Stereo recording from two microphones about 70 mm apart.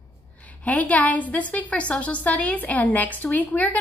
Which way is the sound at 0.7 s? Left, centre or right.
Left.